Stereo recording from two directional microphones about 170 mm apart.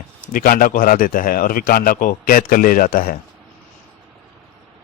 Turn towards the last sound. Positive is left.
turn(degrees=55)  # may be behind; listen again after turning